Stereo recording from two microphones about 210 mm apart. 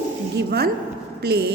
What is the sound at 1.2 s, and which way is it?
Speech, 50° right (ahead or behind).